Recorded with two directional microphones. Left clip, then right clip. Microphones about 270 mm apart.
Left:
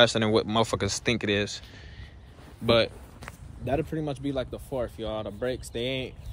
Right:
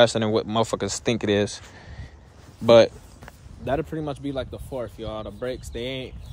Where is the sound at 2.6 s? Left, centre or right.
Right.